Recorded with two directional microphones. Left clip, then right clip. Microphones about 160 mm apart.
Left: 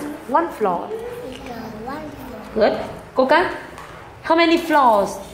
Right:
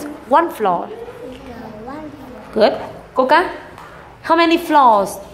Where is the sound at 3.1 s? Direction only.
10° right (ahead or behind).